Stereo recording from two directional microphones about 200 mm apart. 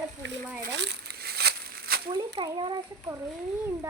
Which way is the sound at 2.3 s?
25° right (ahead or behind).